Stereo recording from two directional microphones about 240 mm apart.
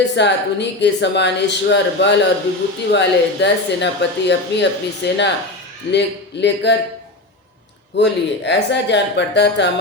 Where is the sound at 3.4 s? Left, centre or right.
Left.